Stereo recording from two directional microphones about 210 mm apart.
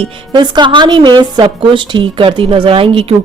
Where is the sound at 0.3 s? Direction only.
20° right (ahead or behind).